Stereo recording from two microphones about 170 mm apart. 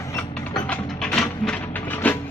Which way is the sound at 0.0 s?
20° left (ahead or behind).